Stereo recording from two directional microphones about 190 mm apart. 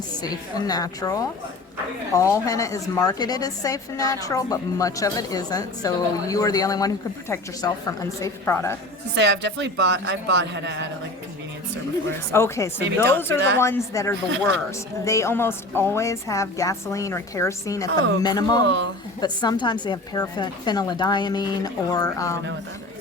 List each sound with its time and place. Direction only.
0.7 s a woman's voice: 20° left (ahead or behind)
9.1 s a man's voice: 65° right (ahead or behind)
12.3 s a woman's voice: 15° left (ahead or behind)
18.6 s a man's voice: 70° right (ahead or behind)
19.2 s a woman's voice: 20° left (ahead or behind)